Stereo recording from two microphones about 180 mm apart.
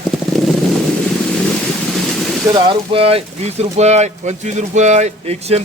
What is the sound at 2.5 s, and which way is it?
Speech, 25° right (ahead or behind).